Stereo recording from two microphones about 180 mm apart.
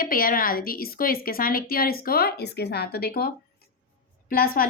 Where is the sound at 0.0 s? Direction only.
50° left (ahead or behind).